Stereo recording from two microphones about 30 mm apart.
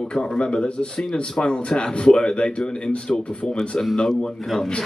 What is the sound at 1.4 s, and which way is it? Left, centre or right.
Speech, left.